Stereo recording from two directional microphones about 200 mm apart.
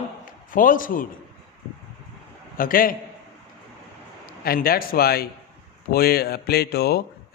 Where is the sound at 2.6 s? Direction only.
45° left (ahead or behind).